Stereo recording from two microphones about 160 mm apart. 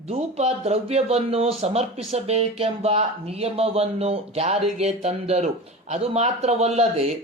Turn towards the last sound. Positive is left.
turn(degrees=-40)  # may be behind; listen again after turning